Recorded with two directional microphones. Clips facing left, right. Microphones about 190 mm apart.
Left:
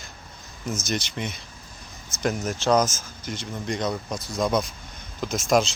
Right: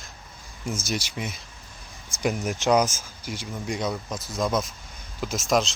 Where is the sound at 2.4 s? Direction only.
15° right (ahead or behind).